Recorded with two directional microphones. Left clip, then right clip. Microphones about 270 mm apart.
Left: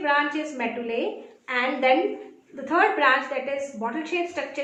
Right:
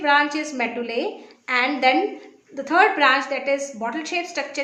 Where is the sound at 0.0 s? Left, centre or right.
Right.